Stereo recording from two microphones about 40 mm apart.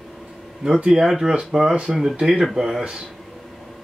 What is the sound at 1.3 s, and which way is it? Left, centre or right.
Speech, centre.